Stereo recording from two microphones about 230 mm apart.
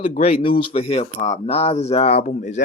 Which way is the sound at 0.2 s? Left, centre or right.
Left.